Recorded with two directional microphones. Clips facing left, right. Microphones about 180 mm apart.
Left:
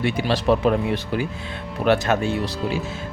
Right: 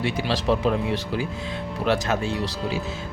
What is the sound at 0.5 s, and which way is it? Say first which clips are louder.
Speech: left 4 dB; 60° left (ahead or behind).